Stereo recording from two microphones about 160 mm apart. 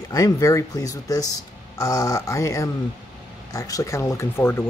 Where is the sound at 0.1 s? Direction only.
20° left (ahead or behind).